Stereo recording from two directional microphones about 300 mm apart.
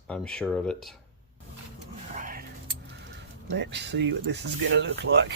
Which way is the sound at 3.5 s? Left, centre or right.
Right.